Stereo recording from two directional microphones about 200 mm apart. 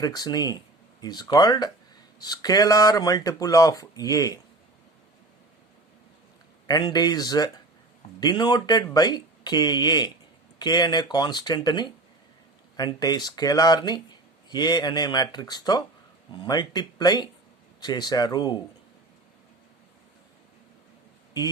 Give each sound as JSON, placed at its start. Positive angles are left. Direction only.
{"t": 0.0, "sound": "speech", "side_deg": 20}
{"t": 6.7, "sound": "speech", "side_deg": 20}